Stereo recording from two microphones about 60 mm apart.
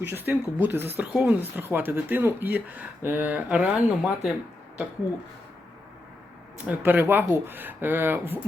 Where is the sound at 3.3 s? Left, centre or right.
Right.